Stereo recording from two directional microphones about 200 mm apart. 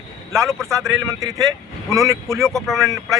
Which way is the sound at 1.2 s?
15° right (ahead or behind).